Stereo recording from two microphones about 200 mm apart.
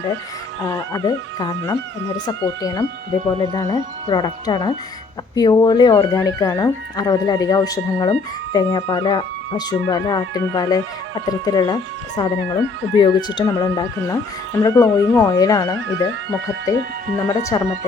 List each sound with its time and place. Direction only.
0.7 s speech: 20° left (ahead or behind)